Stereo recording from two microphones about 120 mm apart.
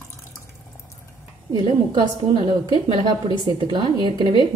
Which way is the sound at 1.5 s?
40° right (ahead or behind).